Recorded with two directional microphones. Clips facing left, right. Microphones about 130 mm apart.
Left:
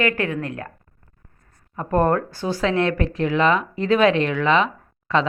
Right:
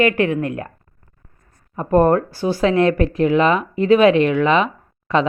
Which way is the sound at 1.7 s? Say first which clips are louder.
Right 5 dB; 15° right (ahead or behind).